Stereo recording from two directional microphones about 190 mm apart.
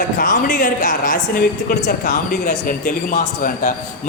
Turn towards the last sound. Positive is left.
turn(degrees=40)  # may be behind; listen again after turning